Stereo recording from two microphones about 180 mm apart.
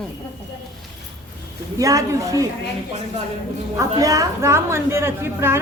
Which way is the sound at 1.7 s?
20° right (ahead or behind).